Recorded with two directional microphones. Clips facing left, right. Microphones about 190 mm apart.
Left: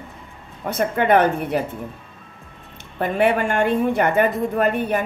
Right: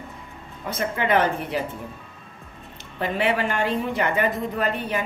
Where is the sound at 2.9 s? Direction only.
55° left (ahead or behind).